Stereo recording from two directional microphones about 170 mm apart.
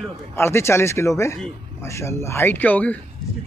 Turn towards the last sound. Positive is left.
turn(degrees=10)  # may be behind; listen again after turning